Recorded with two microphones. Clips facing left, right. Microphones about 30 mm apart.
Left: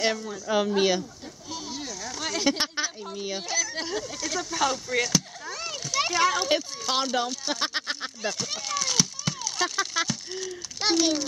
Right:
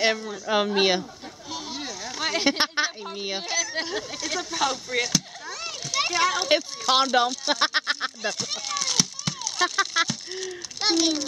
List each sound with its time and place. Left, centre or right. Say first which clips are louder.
0.0 s speech: right 3 dB; centre
8.3 s speech: right 1 dB; centre